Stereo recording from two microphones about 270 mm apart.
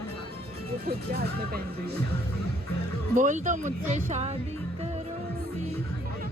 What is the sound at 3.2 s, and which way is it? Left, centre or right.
Speech, right.